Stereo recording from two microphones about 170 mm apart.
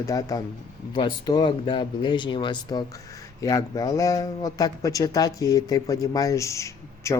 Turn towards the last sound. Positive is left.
turn(degrees=15)  # may be behind; listen again after turning